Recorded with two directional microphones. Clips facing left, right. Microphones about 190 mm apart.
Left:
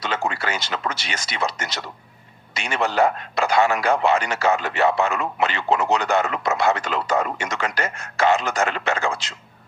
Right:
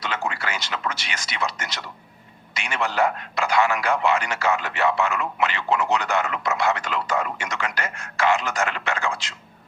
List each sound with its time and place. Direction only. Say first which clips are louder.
0.0 s a man's voice: left 3 dB; 35° left (ahead or behind)